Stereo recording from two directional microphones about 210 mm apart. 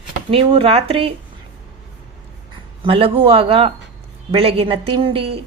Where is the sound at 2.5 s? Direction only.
25° right (ahead or behind).